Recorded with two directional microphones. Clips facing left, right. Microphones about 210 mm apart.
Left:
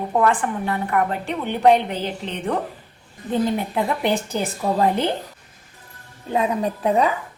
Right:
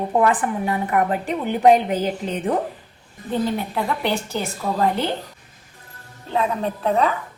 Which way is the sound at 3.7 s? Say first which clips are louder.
Left 2 dB; 20° left (ahead or behind).